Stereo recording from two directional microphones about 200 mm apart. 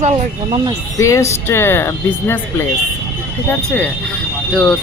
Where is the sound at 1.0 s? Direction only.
15° left (ahead or behind).